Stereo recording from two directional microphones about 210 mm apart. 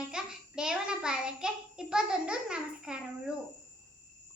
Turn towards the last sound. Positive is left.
turn(degrees=-5)  # may be behind; listen again after turning